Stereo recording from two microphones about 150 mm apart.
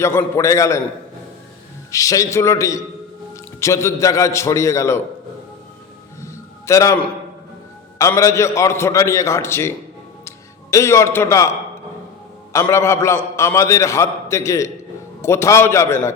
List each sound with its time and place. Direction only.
0.0 s a man's voice: 15° left (ahead or behind)
1.9 s a man's voice: 20° left (ahead or behind)
6.2 s a sound: 20° left (ahead or behind)
7.9 s a man's voice: 20° left (ahead or behind)
12.5 s a man's voice: 20° left (ahead or behind)